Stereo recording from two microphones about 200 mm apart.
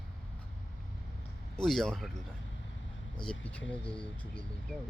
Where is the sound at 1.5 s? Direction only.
Centre (ahead or behind).